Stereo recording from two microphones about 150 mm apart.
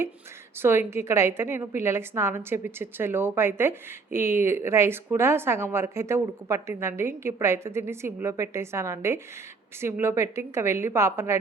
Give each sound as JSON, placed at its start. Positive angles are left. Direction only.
{"t": 0.6, "sound": "a woman's voice", "side_deg": -15}